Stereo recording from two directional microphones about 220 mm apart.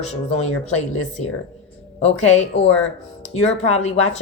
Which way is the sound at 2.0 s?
30° left (ahead or behind).